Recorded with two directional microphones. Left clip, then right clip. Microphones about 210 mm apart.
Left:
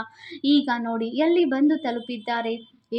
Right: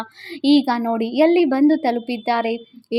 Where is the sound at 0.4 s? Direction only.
35° right (ahead or behind).